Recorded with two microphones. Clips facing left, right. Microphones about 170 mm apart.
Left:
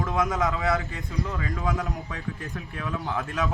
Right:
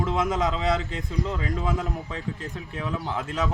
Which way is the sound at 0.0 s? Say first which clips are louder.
Right 1 dB; 20° right (ahead or behind).